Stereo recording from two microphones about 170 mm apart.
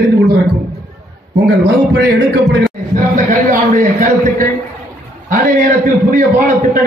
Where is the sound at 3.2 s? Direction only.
50° right (ahead or behind).